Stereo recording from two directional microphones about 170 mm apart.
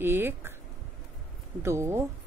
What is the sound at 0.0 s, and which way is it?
Speech, 10° right (ahead or behind).